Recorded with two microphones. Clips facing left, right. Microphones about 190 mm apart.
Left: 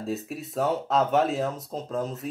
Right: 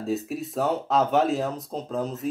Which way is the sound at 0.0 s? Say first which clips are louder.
Right 4 dB; centre (ahead or behind).